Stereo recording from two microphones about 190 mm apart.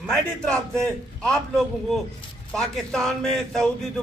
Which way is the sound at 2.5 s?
5° left (ahead or behind).